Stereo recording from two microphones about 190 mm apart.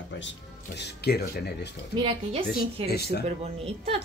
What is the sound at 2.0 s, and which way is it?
Speech, 25° right (ahead or behind).